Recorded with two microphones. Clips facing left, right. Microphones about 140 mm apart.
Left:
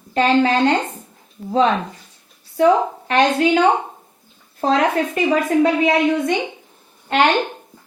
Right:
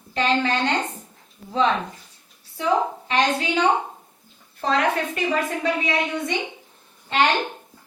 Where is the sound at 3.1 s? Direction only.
60° left (ahead or behind).